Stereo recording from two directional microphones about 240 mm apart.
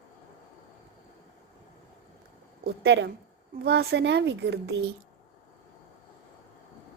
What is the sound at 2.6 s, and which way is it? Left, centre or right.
A woman's voice, right.